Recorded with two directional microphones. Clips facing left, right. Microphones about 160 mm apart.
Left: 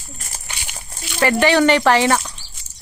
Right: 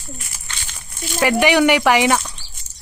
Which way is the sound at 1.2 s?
10° right (ahead or behind).